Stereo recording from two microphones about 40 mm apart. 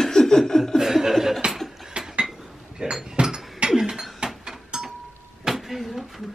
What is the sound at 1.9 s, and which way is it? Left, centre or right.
Cutlery, right.